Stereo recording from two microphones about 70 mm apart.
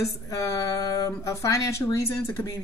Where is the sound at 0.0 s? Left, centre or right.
Left.